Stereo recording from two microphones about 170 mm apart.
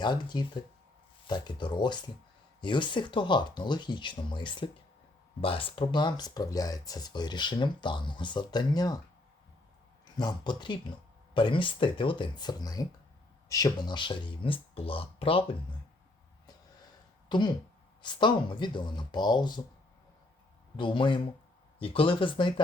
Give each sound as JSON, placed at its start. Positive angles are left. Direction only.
{"t": 0.0, "sound": "speech", "side_deg": 25}
{"t": 10.2, "sound": "speech", "side_deg": 25}
{"t": 17.2, "sound": "speech", "side_deg": 25}
{"t": 20.7, "sound": "speech", "side_deg": 30}